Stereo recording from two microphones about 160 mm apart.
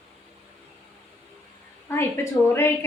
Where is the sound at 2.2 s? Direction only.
15° left (ahead or behind).